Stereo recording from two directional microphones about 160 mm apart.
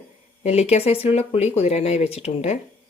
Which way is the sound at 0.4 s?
40° left (ahead or behind).